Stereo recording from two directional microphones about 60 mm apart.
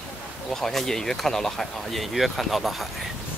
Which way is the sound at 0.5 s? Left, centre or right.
Centre.